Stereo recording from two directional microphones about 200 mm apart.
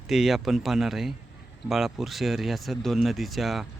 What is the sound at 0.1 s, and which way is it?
Speech, centre (ahead or behind).